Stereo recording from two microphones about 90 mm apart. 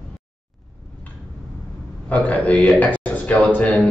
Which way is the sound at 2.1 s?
15° left (ahead or behind).